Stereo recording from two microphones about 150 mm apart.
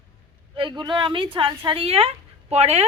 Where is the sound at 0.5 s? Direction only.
30° right (ahead or behind).